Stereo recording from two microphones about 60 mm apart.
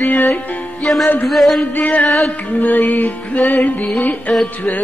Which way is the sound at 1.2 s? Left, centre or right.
Centre.